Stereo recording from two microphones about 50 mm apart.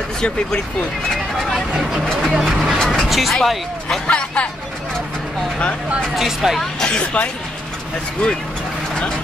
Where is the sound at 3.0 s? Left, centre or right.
Centre.